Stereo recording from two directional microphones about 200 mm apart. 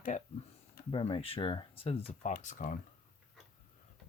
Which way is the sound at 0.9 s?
25° left (ahead or behind).